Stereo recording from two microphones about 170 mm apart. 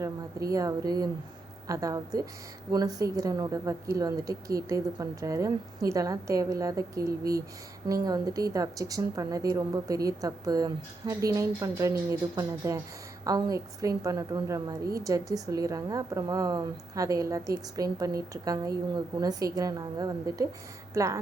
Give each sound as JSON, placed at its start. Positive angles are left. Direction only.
{"t": 0.0, "sound": "a woman's voice", "side_deg": -20}